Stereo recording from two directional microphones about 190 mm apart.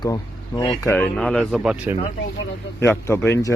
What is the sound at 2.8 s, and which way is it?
Speech, 15° left (ahead or behind).